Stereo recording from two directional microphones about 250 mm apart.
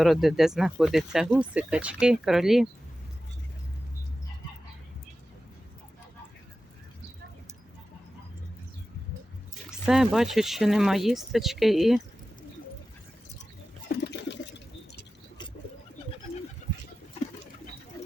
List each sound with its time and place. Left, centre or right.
0.0 s speech: centre
9.6 s speech: centre
13.8 s a sound: left